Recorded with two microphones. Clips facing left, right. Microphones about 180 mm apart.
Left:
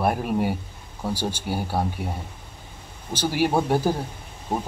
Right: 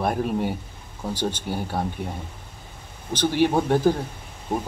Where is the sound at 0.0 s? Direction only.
10° left (ahead or behind).